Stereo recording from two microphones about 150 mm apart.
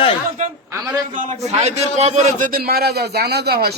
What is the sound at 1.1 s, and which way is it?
A man's voice, 45° right (ahead or behind).